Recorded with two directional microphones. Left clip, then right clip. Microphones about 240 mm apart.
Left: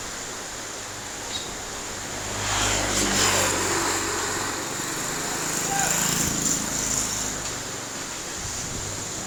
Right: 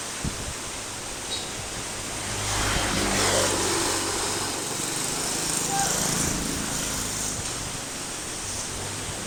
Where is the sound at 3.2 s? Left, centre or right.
Left.